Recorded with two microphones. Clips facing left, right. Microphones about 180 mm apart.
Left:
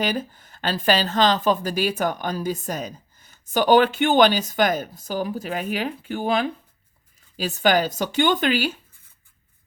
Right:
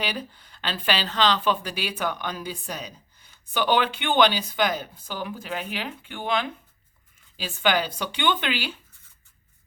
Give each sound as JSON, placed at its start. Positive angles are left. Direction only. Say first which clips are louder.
{"t": 0.0, "sound": "speech", "louder": "left 6 dB", "side_deg": 45}